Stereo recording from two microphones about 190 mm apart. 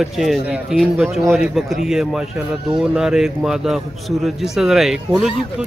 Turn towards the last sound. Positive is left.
turn(degrees=0)  # may be behind; listen again after turning